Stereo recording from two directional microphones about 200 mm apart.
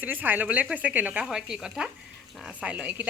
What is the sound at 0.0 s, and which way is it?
A woman's voice, 10° right (ahead or behind).